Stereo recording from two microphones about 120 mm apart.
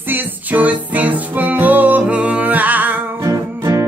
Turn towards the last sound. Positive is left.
turn(degrees=-25)  # may be behind; listen again after turning